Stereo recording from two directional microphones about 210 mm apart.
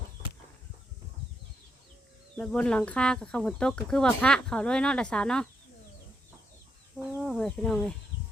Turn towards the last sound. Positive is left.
turn(degrees=0)  # may be behind; listen again after turning